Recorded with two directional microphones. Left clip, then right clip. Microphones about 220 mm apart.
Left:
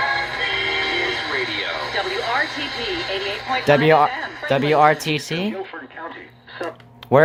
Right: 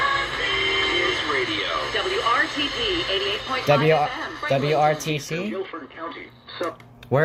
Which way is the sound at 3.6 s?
25° left (ahead or behind).